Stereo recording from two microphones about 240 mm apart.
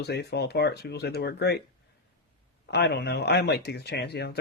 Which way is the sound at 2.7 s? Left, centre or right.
Left.